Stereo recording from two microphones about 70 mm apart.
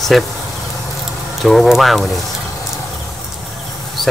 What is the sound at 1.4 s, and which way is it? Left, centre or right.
Speech, centre.